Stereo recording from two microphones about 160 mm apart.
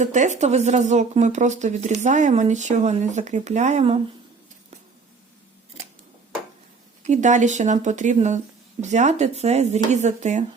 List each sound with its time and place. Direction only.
0.0 s a woman's voice: 50° right (ahead or behind)
7.0 s a woman's voice: 50° right (ahead or behind)